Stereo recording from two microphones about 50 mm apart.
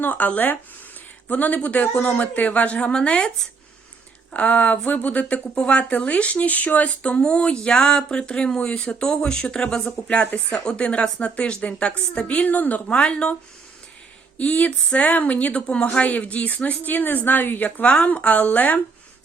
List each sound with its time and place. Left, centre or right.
0.0 s speech: left
9.0 s speech: centre
14.3 s speech: left
17.8 s speech: centre
18.1 s speech: left